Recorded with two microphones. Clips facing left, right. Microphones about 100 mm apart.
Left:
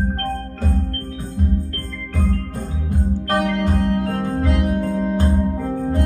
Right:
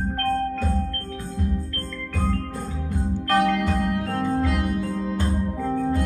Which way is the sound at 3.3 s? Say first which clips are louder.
Even; 55° left (ahead or behind).